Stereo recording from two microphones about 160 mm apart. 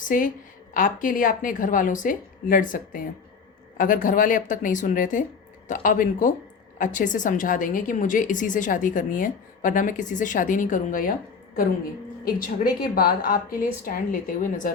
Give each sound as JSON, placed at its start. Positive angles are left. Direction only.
{"t": 0.1, "sound": "a woman's voice", "side_deg": 60}
{"t": 12.2, "sound": "a woman's voice", "side_deg": 65}